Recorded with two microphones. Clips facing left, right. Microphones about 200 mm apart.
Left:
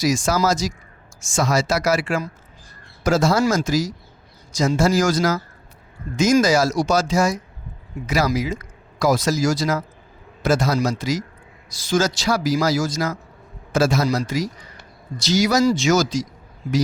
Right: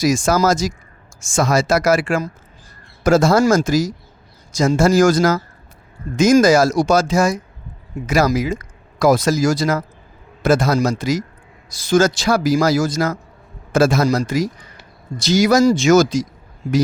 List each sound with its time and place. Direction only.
0.0 s speech: 50° right (ahead or behind)